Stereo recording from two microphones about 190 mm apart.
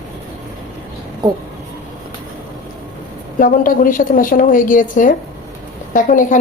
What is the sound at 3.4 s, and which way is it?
A woman's voice, 45° left (ahead or behind).